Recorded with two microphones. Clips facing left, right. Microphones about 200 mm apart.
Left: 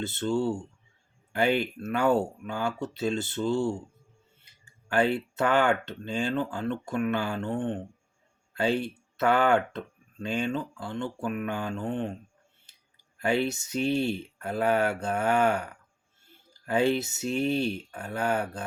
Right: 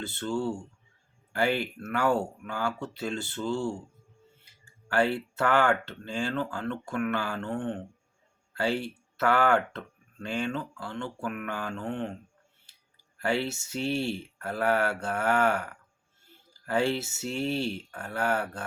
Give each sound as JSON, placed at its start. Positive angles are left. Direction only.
{"t": 0.0, "sound": "speech", "side_deg": 20}
{"t": 4.9, "sound": "speech", "side_deg": 20}
{"t": 13.1, "sound": "speech", "side_deg": 20}